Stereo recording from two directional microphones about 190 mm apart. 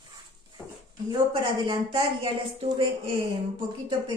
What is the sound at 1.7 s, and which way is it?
A woman's voice, 25° right (ahead or behind).